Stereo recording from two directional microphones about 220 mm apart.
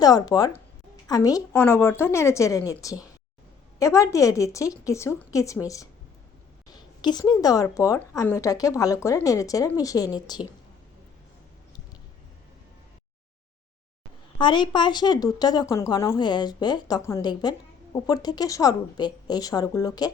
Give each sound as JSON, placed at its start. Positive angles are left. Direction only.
{"t": 0.0, "sound": "speech", "side_deg": 15}
{"t": 14.3, "sound": "a woman's voice", "side_deg": 20}